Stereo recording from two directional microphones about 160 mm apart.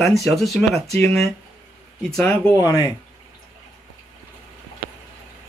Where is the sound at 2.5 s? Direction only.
25° left (ahead or behind).